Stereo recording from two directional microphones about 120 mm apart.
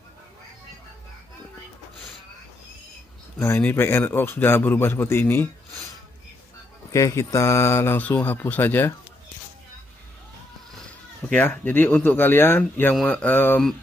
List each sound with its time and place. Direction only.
3.3 s a man's voice: 20° left (ahead or behind)
6.9 s a man's voice: 25° left (ahead or behind)
11.2 s speech: 15° left (ahead or behind)